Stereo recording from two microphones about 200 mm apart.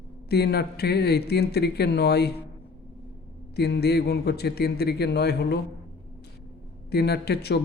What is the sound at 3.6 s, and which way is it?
Speech, 55° left (ahead or behind).